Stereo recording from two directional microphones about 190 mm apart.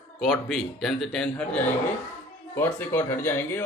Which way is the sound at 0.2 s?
Centre (ahead or behind).